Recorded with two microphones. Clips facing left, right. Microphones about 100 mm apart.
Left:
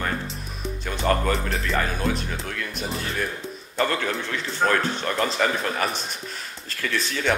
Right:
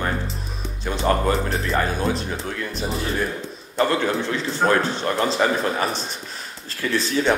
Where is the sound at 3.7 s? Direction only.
30° right (ahead or behind).